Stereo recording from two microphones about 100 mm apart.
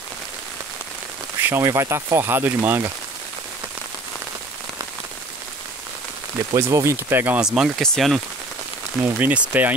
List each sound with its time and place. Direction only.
1.4 s speech: 20° right (ahead or behind)
6.5 s speech: 30° right (ahead or behind)
7.3 s speech: 5° right (ahead or behind)
9.2 s speech: 15° right (ahead or behind)